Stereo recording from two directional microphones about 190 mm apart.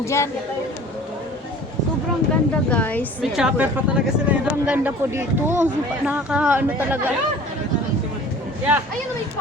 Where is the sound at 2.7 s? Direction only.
10° left (ahead or behind).